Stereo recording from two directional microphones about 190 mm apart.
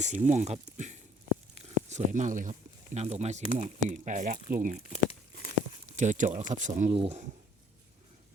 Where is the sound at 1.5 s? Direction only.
35° right (ahead or behind).